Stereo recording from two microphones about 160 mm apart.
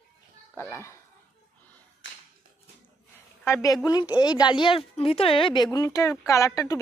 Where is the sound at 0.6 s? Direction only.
15° left (ahead or behind).